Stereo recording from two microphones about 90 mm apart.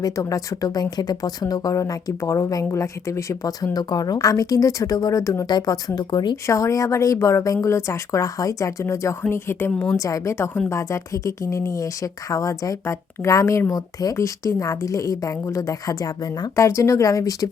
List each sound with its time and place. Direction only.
0.0 s speech: 40° left (ahead or behind)
5.5 s speech: 50° left (ahead or behind)
6.3 s a woman's voice: 35° left (ahead or behind)
10.0 s speech: 40° left (ahead or behind)
10.3 s a woman's voice: 25° left (ahead or behind)